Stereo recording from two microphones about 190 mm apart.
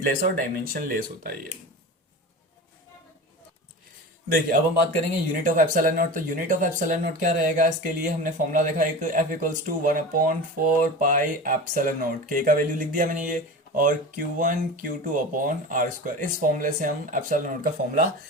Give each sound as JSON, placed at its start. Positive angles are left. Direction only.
{"t": 0.0, "sound": "speech", "side_deg": -50}
{"t": 5.3, "sound": "speech", "side_deg": -45}